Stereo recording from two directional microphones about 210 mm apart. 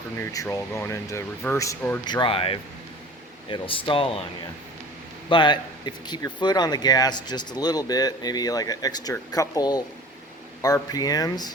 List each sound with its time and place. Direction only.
0.2 s speech: 15° left (ahead or behind)
2.0 s speech: 20° left (ahead or behind)
5.3 s speech: 20° left (ahead or behind)